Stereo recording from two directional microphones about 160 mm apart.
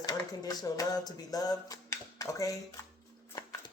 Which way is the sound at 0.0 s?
25° left (ahead or behind).